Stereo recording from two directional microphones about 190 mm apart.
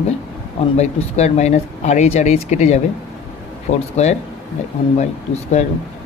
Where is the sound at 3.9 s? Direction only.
35° left (ahead or behind).